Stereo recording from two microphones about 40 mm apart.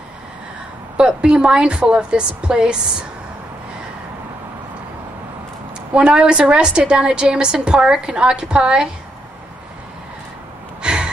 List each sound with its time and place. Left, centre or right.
0.9 s a woman's voice: right
5.9 s a woman's voice: right
10.8 s gasp: right